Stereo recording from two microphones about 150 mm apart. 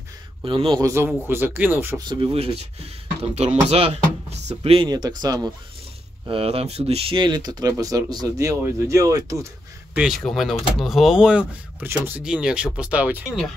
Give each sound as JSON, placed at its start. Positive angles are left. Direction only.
{"t": 0.4, "sound": "a man's voice", "side_deg": -30}
{"t": 2.0, "sound": "speech", "side_deg": -30}
{"t": 4.8, "sound": "speech", "side_deg": -25}
{"t": 6.2, "sound": "speech", "side_deg": -35}
{"t": 9.9, "sound": "speech", "side_deg": 0}